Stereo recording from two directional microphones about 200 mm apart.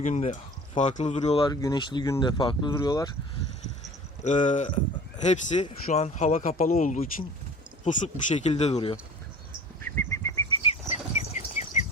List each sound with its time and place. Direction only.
0.0 s speech: 35° left (ahead or behind); by 3.1 s 20° left (ahead or behind)
4.2 s speech: 35° left (ahead or behind)
9.9 s bird: 10° left (ahead or behind)
10.7 s bird: 35° left (ahead or behind)